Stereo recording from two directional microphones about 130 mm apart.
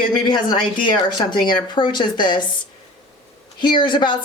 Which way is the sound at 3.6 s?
35° left (ahead or behind).